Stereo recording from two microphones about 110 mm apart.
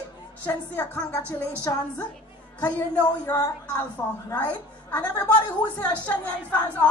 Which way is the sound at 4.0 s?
25° left (ahead or behind).